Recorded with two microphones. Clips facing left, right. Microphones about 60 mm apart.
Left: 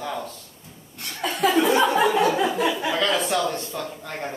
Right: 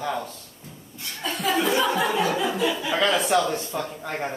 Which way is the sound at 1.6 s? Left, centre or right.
Left.